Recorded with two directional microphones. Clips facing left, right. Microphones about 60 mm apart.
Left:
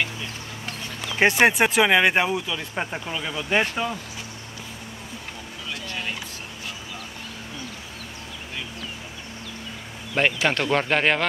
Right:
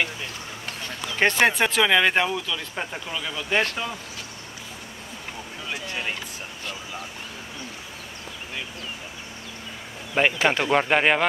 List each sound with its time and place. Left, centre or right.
1.1 s speech: centre
5.7 s a sound: centre
10.2 s speech: centre